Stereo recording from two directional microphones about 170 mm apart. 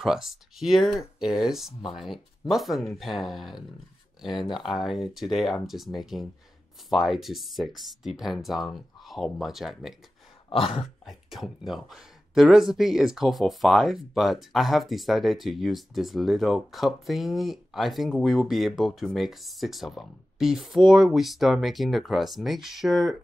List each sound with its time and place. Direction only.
0.0 s speech: centre (ahead or behind)
10.5 s a sound: 35° left (ahead or behind)
10.8 s speech: centre (ahead or behind)